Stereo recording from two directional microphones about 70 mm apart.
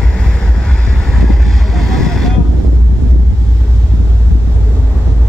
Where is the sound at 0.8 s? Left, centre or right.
Centre.